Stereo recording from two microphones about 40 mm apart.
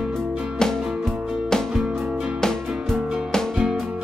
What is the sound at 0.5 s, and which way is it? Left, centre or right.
Music, centre.